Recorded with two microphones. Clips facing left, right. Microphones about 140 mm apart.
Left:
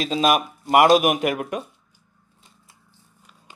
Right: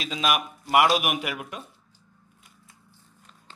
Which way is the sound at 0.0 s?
40° left (ahead or behind).